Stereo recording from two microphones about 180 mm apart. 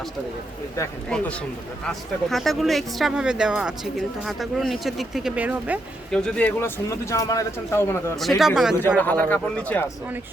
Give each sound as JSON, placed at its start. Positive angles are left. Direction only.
{"t": 0.8, "sound": "speech", "side_deg": 15}
{"t": 6.1, "sound": "speech", "side_deg": 5}
{"t": 8.1, "sound": "speech", "side_deg": 0}
{"t": 9.0, "sound": "speech", "side_deg": 10}